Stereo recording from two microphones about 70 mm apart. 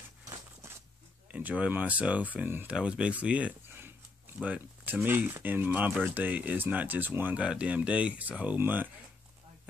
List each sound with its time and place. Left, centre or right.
0.3 s a sound: right
1.3 s speech: centre
2.7 s speech: centre
7.3 s speech: centre